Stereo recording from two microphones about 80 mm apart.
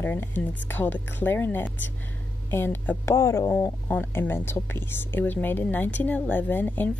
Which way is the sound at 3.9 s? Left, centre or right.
Left.